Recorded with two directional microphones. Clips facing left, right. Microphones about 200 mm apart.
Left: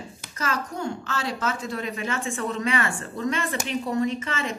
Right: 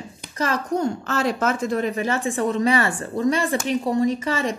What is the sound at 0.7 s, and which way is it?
A woman's voice, 40° right (ahead or behind).